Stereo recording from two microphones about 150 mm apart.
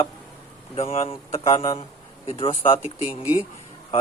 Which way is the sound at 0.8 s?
40° left (ahead or behind).